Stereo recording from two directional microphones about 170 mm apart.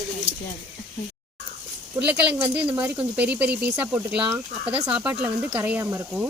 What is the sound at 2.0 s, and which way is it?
Speech, 10° right (ahead or behind).